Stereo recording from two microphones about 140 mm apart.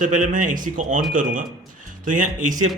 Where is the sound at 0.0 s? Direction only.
65° right (ahead or behind).